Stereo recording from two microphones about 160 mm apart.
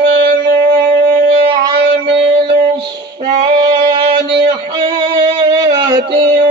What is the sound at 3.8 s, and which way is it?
Music, 30° right (ahead or behind).